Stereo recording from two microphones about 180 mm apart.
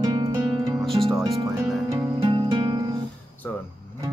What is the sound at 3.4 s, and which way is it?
Vehicle, 10° left (ahead or behind).